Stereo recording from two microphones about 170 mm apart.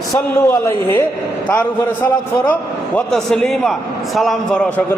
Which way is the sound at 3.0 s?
5° left (ahead or behind).